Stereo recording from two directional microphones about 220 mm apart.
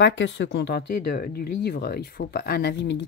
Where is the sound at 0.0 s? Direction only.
55° left (ahead or behind).